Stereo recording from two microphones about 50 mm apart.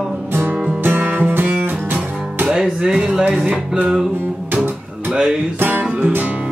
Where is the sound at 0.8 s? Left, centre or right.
Right.